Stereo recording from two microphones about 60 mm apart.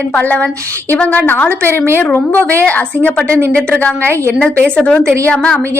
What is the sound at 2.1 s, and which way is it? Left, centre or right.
A woman's voice, left.